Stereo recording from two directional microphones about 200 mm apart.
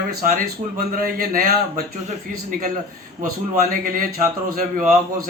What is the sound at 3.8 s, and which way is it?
Speech, 45° right (ahead or behind).